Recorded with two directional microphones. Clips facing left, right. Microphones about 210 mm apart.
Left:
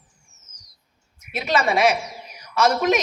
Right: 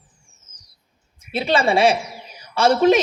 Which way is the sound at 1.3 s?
30° right (ahead or behind).